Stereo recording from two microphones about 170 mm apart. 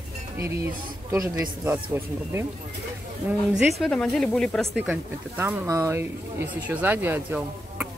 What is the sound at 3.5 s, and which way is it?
Speech, centre (ahead or behind).